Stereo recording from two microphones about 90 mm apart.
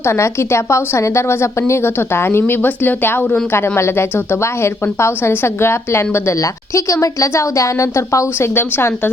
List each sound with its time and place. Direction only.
0.0 s speech: 30° left (ahead or behind)